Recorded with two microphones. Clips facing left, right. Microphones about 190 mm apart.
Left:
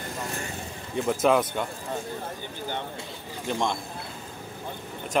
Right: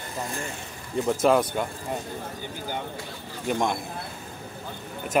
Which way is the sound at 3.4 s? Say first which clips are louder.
Right 2 dB; 10° right (ahead or behind).